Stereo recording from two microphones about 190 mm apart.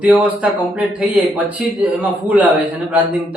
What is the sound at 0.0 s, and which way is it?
Speech, 5° right (ahead or behind).